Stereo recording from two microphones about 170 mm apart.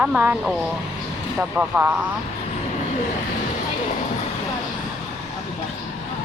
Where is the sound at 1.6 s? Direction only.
10° right (ahead or behind).